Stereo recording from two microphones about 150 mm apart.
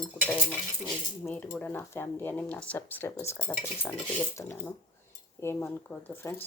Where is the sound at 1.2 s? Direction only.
10° left (ahead or behind).